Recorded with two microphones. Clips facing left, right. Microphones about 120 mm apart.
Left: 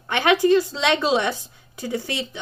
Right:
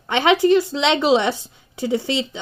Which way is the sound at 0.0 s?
20° right (ahead or behind).